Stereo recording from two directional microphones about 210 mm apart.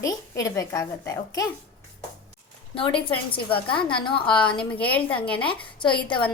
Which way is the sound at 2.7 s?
25° left (ahead or behind).